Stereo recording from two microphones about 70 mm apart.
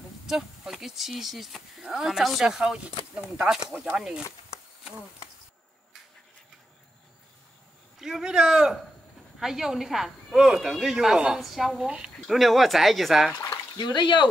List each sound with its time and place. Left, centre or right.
0.3 s a woman's voice: centre
8.0 s a woman's voice: centre
12.4 s a woman's voice: centre
13.7 s speech: left